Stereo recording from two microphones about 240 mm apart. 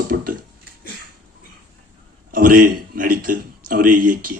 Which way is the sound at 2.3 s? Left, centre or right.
Right.